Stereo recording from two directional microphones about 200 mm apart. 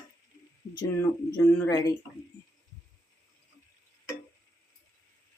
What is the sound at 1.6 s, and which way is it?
Speech, 15° left (ahead or behind).